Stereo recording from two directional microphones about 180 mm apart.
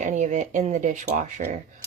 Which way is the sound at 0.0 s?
40° right (ahead or behind).